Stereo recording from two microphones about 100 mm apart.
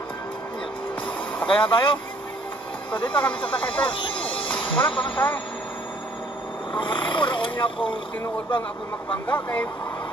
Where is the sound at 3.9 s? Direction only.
60° left (ahead or behind).